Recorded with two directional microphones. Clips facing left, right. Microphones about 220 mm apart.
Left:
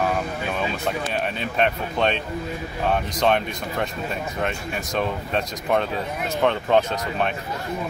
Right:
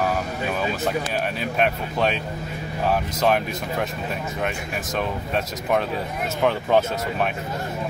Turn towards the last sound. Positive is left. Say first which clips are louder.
# even
turn(degrees=-5)  # may be behind; listen again after turning